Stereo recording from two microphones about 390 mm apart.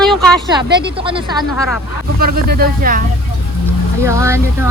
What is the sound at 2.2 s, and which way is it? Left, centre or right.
Speech, right.